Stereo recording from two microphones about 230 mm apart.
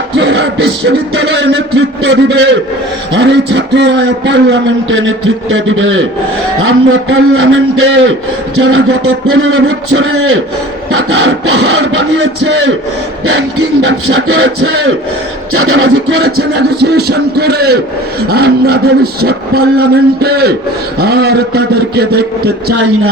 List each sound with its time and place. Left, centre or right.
0.2 s a man's voice: right
13.8 s a man's voice: right
15.5 s a man's voice: right
15.8 s a man's voice: right